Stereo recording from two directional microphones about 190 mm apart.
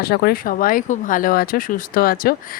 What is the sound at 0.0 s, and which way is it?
Speech, 55° left (ahead or behind).